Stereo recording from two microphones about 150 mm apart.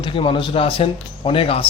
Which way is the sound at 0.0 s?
35° left (ahead or behind).